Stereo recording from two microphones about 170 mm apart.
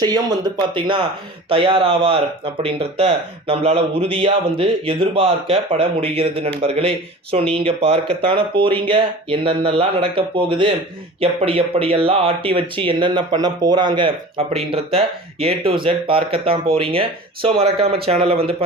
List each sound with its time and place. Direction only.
0.0 s speech: 25° right (ahead or behind)